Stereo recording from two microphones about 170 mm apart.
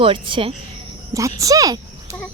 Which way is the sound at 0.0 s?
30° right (ahead or behind).